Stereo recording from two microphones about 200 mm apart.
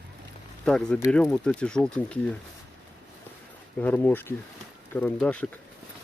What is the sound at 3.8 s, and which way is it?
Speech, 10° left (ahead or behind).